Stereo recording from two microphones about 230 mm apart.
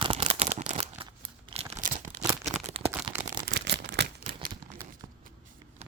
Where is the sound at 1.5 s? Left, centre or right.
Right.